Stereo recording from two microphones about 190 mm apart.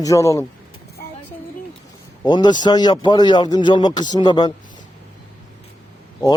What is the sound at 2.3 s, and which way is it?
A man's voice, 25° left (ahead or behind).